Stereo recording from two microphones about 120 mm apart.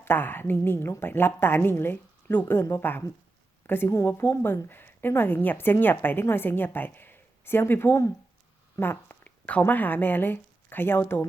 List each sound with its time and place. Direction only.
0.0 s a woman's voice: 15° left (ahead or behind)